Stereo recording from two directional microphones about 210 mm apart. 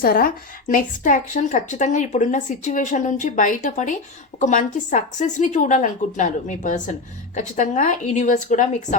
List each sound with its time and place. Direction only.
0.0 s a woman's voice: 45° left (ahead or behind)